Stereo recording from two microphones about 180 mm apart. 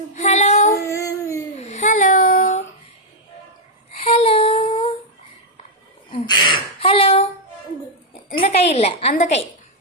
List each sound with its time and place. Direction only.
0.1 s child singing: 40° left (ahead or behind)
0.7 s a sound: 15° left (ahead or behind)
1.6 s child singing: 40° left (ahead or behind)
4.0 s female singing: 35° left (ahead or behind)
6.1 s a sound: 25° left (ahead or behind)
8.4 s a woman's voice: 35° left (ahead or behind)